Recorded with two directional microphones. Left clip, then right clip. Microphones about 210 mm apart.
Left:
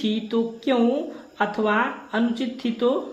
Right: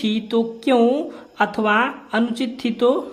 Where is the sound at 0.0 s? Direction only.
35° right (ahead or behind).